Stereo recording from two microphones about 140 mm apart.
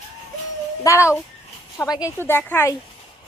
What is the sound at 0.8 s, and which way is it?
A woman's voice, 20° left (ahead or behind).